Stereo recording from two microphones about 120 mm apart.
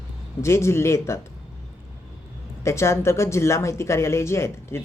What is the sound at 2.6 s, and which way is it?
Speech, 25° left (ahead or behind).